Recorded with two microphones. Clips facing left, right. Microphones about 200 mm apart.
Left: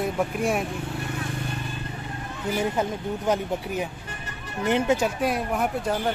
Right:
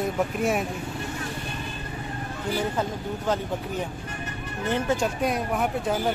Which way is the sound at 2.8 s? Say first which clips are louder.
Left 2 dB; 15° left (ahead or behind).